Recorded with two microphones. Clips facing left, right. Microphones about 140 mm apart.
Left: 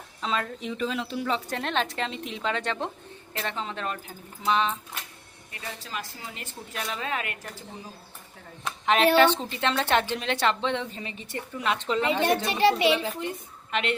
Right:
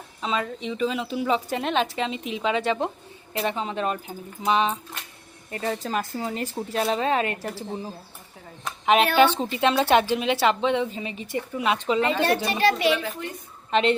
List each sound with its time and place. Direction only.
0.2 s a woman's voice: 5° right (ahead or behind)
5.5 s a woman's voice: 45° right (ahead or behind)
9.1 s a woman's voice: 10° right (ahead or behind)
12.5 s a woman's voice: 25° left (ahead or behind)
13.7 s a woman's voice: 30° right (ahead or behind)